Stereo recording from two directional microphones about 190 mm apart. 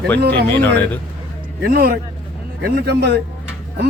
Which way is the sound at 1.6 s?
50° right (ahead or behind).